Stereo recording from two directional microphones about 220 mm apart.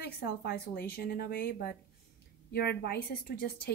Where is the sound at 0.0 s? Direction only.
45° left (ahead or behind).